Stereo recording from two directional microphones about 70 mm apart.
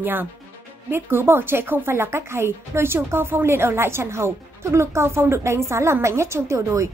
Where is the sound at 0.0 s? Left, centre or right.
Right.